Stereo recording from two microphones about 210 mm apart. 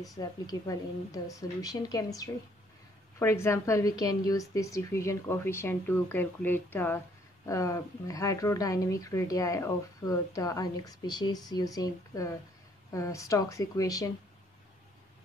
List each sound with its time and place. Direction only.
0.0 s a woman's voice: 20° left (ahead or behind)